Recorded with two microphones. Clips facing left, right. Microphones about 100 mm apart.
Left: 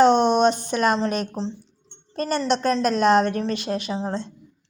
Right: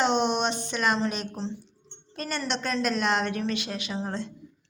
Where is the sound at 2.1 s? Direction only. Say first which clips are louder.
Left 8 dB; 35° left (ahead or behind).